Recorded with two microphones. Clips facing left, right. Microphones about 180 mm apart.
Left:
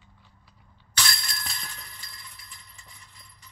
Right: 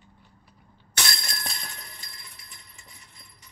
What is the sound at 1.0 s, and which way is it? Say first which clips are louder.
Bicycle bell: even; 45° right (ahead or behind).